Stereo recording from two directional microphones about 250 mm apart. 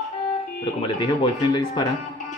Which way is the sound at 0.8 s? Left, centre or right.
Centre.